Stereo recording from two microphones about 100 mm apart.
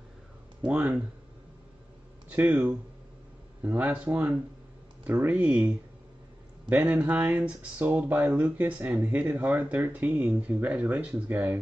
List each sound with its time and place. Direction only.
0.7 s speech: 15° right (ahead or behind)
2.2 s speech: 15° right (ahead or behind)
6.9 s speech: 10° right (ahead or behind)